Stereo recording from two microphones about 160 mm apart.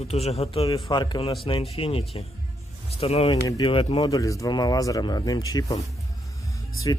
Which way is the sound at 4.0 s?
20° left (ahead or behind).